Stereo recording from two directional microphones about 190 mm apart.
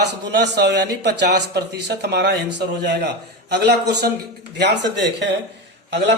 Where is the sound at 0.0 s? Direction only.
65° right (ahead or behind).